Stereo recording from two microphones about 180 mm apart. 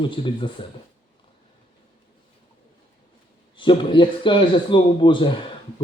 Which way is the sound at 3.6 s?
25° left (ahead or behind).